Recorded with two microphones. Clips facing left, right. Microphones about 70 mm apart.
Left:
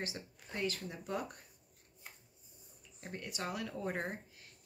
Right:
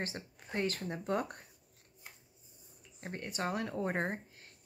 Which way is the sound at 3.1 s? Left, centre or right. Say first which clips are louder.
Right 4 dB; right.